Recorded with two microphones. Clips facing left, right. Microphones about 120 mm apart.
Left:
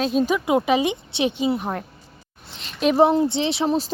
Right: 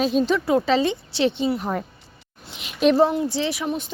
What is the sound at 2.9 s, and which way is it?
A woman's voice, 20° left (ahead or behind).